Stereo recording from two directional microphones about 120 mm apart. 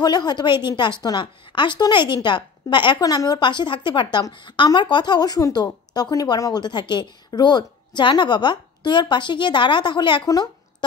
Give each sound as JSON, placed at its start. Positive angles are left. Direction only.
{"t": 0.0, "sound": "speech", "side_deg": 35}